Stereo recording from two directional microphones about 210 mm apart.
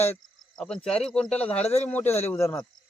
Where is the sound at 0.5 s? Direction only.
5° left (ahead or behind).